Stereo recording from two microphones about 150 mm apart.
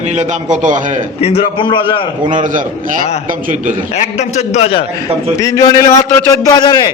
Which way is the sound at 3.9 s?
50° left (ahead or behind).